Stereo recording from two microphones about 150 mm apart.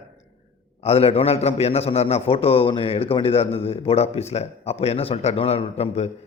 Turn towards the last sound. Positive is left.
turn(degrees=40)  # may be behind; listen again after turning